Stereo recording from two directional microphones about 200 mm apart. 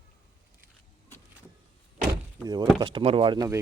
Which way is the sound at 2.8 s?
25° right (ahead or behind).